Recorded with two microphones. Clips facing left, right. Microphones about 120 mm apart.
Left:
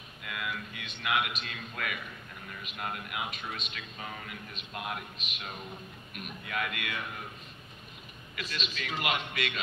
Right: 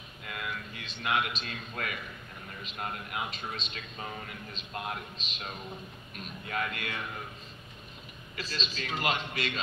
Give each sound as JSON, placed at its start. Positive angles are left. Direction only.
{"t": 0.2, "sound": "a sound", "side_deg": -35}
{"t": 2.6, "sound": "speech", "side_deg": -30}
{"t": 8.4, "sound": "speech", "side_deg": -35}